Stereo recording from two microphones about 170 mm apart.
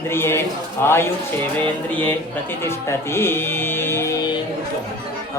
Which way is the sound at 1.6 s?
10° left (ahead or behind).